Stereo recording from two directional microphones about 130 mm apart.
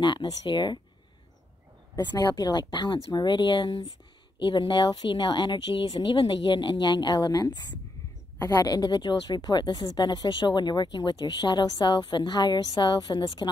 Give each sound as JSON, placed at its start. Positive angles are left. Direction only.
{"t": 0.0, "sound": "speech", "side_deg": 35}
{"t": 2.0, "sound": "speech", "side_deg": 30}